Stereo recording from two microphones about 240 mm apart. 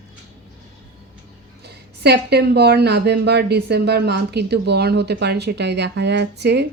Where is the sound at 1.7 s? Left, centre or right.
Right.